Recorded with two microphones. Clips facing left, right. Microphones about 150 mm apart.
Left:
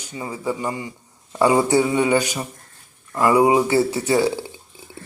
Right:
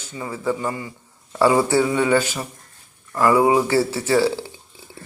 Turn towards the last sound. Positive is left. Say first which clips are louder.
# even
turn(degrees=15)  # may be behind; listen again after turning